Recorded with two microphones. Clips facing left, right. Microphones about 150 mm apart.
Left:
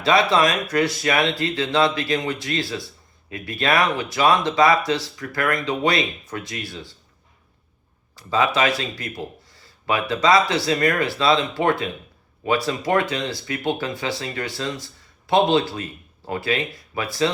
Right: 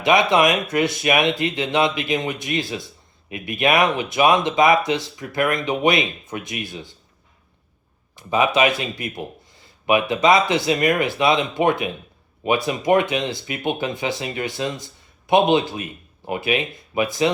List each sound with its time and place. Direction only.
0.0 s speech: 20° right (ahead or behind)
8.1 s speech: 20° right (ahead or behind)